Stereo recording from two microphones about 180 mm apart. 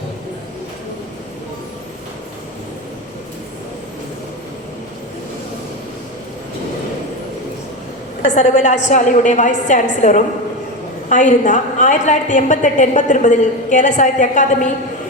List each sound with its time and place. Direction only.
8.2 s a woman's voice: 40° left (ahead or behind)